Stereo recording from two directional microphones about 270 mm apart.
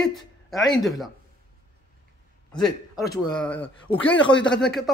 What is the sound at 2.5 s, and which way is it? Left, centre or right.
A man's voice, centre.